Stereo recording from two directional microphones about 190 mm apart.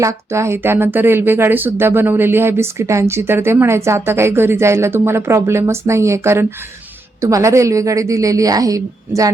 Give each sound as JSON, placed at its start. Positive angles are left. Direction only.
{"t": 0.0, "sound": "speech", "side_deg": -15}